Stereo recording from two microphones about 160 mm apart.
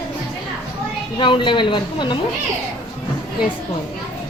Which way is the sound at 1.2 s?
30° left (ahead or behind).